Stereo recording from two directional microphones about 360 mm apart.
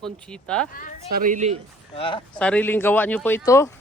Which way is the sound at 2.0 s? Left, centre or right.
Centre.